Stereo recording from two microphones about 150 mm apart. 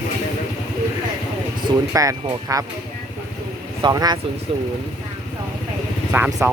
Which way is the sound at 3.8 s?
25° right (ahead or behind).